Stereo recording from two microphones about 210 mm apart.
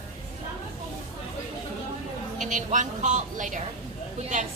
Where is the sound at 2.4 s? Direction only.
35° right (ahead or behind).